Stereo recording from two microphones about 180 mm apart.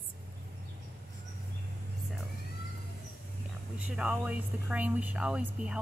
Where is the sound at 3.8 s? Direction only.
5° right (ahead or behind).